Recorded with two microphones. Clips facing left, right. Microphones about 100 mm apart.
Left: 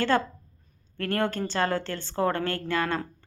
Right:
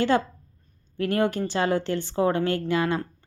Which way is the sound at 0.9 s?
15° right (ahead or behind).